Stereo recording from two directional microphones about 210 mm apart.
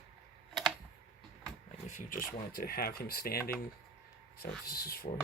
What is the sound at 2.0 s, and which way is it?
Speech, 40° left (ahead or behind).